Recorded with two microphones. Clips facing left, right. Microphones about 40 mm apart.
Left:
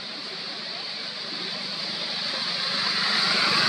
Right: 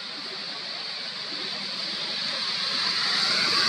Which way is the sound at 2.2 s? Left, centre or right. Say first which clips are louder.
Left 1 dB; centre.